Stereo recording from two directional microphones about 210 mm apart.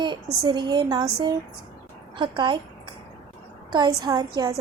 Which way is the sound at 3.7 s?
20° right (ahead or behind).